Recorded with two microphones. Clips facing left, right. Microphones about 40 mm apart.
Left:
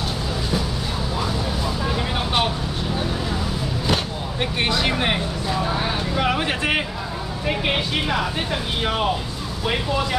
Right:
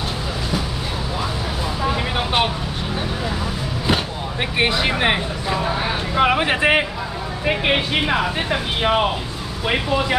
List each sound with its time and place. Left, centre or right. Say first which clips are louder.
1.9 s vehicle: right 5 dB; right
4.6 s speech: right 3 dB; centre